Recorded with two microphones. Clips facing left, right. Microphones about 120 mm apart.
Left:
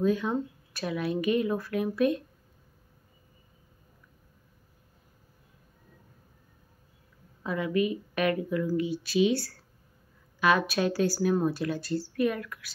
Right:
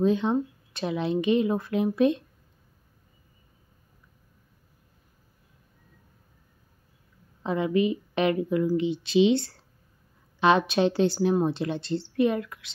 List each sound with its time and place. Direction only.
0.0 s speech: 25° right (ahead or behind)
7.4 s speech: 25° right (ahead or behind)